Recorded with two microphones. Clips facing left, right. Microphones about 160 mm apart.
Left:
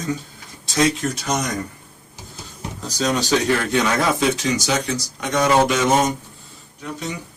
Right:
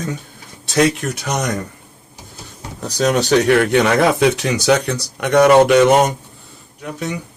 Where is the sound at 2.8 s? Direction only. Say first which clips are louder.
Right 5 dB; 60° right (ahead or behind).